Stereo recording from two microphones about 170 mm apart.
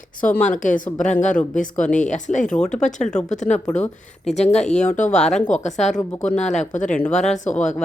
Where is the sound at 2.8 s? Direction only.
45° left (ahead or behind).